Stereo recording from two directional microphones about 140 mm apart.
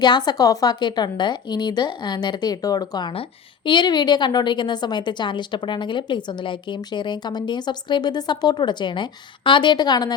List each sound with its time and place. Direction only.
0.0 s a woman's voice: 30° left (ahead or behind)